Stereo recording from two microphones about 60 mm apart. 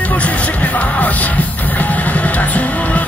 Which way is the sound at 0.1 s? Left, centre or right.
Left.